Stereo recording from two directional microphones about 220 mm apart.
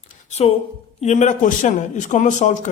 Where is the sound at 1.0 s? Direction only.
30° left (ahead or behind).